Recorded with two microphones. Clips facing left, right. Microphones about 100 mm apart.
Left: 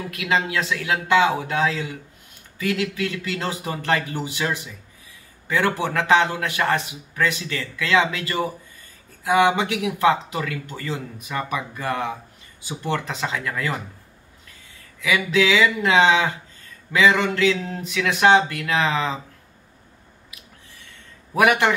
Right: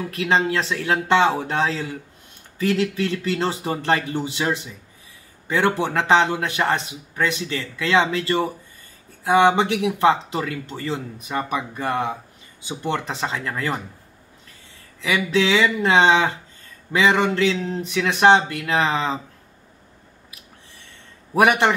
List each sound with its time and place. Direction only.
0.1 s speech: 30° right (ahead or behind)
15.0 s speech: 30° right (ahead or behind)
21.4 s speech: 25° right (ahead or behind)